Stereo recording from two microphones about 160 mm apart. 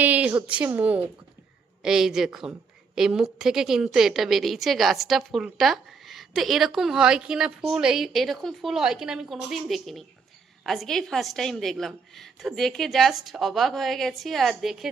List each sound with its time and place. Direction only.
0.0 s a woman's voice: 10° right (ahead or behind)